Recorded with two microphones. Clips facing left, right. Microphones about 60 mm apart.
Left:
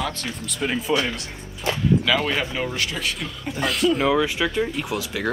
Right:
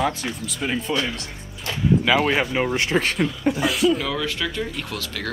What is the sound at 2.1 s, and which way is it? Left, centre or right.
Speech, centre.